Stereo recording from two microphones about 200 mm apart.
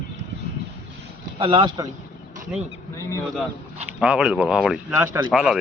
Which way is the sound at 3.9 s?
5° right (ahead or behind).